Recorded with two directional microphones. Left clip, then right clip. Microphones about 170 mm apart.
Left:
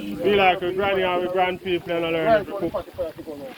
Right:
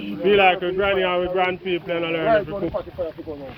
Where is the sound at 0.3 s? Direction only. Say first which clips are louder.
Right 2 dB; 90° left.